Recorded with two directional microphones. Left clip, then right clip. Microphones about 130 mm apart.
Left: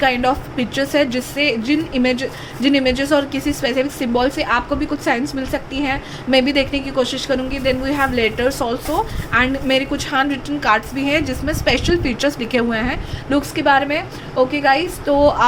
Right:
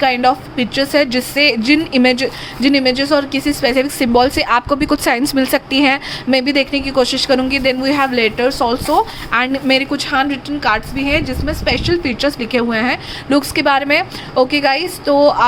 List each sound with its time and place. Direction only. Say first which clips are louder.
0.0 s a woman's voice: right 3 dB; 25° right (ahead or behind); by 6.0 s 55° right (ahead or behind)
6.3 s a woman's voice: right 1 dB; 30° right (ahead or behind)
6.9 s a woman's voice: right 6 dB; 45° right (ahead or behind); by 8.7 s 25° right (ahead or behind)
8.7 s a woman's voice: right 6 dB; 45° right (ahead or behind); by 12.8 s 15° right (ahead or behind)
12.8 s a woman's voice: right 5 dB; 35° right (ahead or behind)